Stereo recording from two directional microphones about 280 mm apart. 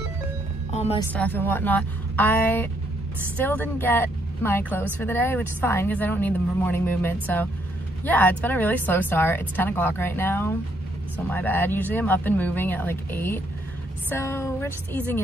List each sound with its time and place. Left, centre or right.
0.7 s music: left
1.1 s a woman's voice: centre